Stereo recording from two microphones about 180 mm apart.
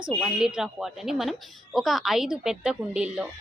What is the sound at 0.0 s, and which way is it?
A woman's voice, centre (ahead or behind).